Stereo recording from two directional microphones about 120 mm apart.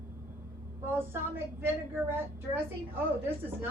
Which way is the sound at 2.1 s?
20° right (ahead or behind).